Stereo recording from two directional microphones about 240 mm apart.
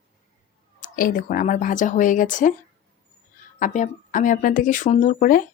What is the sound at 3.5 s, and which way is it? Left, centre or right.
Speech, left.